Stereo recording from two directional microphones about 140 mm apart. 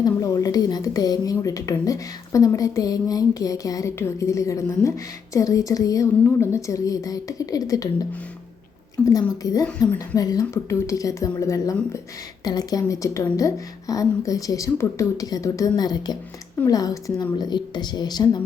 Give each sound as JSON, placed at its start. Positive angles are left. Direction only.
{"t": 0.0, "sound": "a woman's voice", "side_deg": 25}
{"t": 9.0, "sound": "a woman's voice", "side_deg": 25}